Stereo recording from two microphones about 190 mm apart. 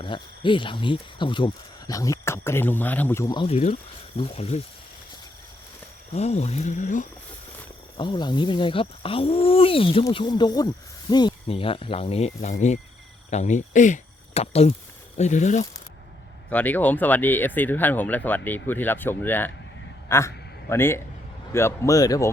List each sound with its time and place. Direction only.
0.0 s speech: 25° left (ahead or behind)
3.4 s speech: 35° left (ahead or behind)
6.1 s speech: 35° left (ahead or behind)
7.9 s speech: 25° left (ahead or behind); by 15.6 s 40° left (ahead or behind)
16.5 s a man's voice: 10° left (ahead or behind)